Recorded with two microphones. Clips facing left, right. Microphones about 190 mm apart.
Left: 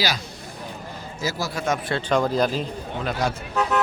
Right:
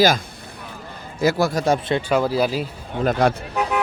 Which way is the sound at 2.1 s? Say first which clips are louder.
Even; 5° right (ahead or behind).